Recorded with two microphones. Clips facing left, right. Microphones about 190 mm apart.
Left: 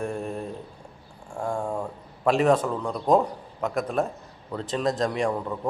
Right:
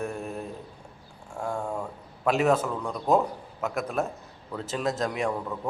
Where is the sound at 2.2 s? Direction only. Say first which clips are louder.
Left 3 dB; 5° right (ahead or behind).